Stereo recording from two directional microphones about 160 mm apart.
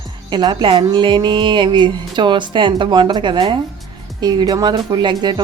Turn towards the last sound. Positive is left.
turn(degrees=-25)  # may be behind; listen again after turning